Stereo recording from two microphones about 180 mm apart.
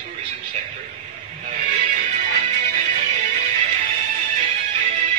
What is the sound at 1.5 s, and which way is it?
Music, 45° right (ahead or behind).